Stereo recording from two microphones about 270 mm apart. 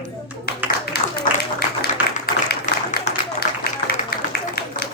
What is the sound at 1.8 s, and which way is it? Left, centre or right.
Tap, left.